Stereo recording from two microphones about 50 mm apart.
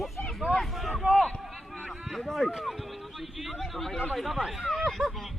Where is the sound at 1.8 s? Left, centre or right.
Centre.